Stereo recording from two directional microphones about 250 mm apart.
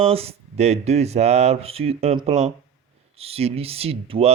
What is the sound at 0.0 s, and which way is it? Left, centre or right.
Speech, right.